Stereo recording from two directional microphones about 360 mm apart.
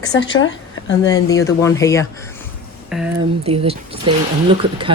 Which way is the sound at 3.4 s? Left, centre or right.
Centre.